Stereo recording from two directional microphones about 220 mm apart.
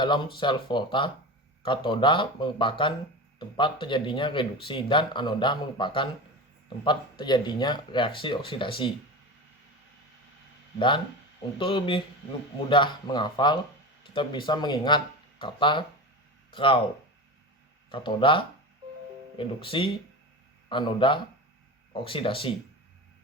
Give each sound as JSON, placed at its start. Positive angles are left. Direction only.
{"t": 0.0, "sound": "speech", "side_deg": 20}
{"t": 10.8, "sound": "speech", "side_deg": 20}
{"t": 17.9, "sound": "speech", "side_deg": 20}